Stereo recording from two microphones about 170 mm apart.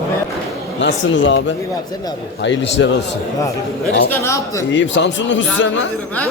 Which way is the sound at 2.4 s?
90° left.